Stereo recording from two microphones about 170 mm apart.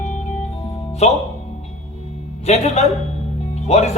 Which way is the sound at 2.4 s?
40° left (ahead or behind).